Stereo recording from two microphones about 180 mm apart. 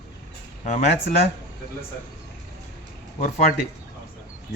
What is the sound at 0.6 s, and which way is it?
Speech, 40° left (ahead or behind).